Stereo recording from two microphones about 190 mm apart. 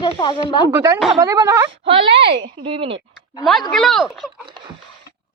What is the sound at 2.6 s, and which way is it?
Speech, 30° right (ahead or behind).